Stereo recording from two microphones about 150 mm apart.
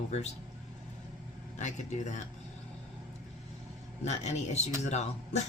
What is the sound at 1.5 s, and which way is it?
Speech, 50° left (ahead or behind).